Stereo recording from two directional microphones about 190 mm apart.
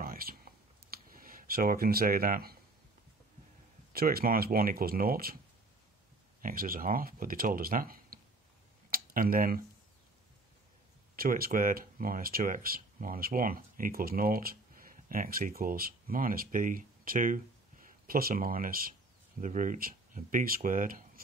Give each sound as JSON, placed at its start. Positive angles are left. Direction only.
{"t": 0.0, "sound": "clicking", "side_deg": -50}
{"t": 3.9, "sound": "speech", "side_deg": -50}
{"t": 6.4, "sound": "speech", "side_deg": -50}
{"t": 11.1, "sound": "speech", "side_deg": -50}